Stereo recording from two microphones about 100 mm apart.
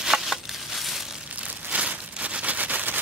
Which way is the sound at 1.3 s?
15° right (ahead or behind).